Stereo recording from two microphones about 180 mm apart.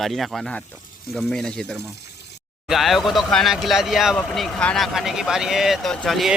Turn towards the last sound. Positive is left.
turn(degrees=0)  # may be behind; listen again after turning